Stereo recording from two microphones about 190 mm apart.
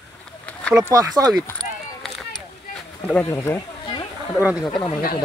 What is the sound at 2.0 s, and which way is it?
Run, centre (ahead or behind).